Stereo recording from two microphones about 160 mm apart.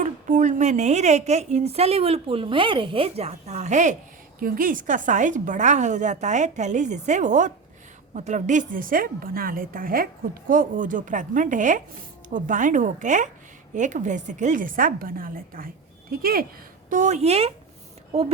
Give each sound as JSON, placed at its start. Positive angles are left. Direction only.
{"t": 0.0, "sound": "a woman's voice", "side_deg": -50}
{"t": 4.4, "sound": "a woman's voice", "side_deg": -65}
{"t": 16.9, "sound": "a woman's voice", "side_deg": -50}